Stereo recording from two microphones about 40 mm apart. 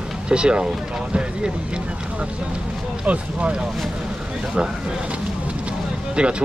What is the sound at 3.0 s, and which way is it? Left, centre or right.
Speech, right.